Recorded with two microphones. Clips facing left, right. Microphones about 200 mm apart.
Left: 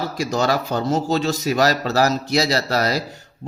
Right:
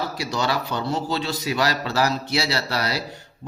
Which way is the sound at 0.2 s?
45° left (ahead or behind).